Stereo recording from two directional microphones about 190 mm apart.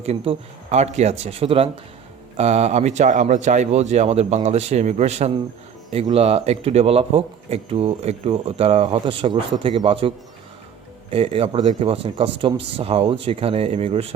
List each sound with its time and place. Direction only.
0.0 s speech: 35° right (ahead or behind)
11.1 s speech: 30° right (ahead or behind)